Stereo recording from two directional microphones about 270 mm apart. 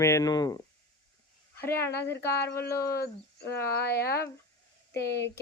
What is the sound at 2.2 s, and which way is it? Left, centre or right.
Speech, centre.